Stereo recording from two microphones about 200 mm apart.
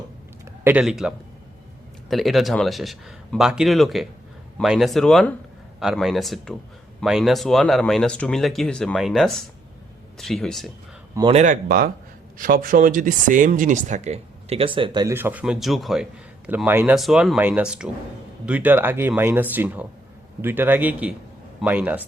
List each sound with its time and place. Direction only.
0.6 s speech: 5° right (ahead or behind)
11.3 s speech: 35° right (ahead or behind)
15.1 s speech: 10° right (ahead or behind)